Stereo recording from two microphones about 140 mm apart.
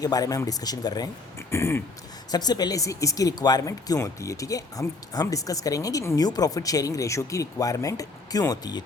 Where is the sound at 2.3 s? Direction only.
30° left (ahead or behind).